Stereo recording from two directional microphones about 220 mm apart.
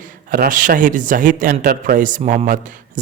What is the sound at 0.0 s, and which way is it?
A man's voice, 40° right (ahead or behind).